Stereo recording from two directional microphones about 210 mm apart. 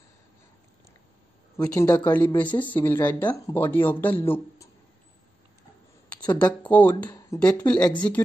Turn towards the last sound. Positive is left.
turn(degrees=5)  # may be behind; listen again after turning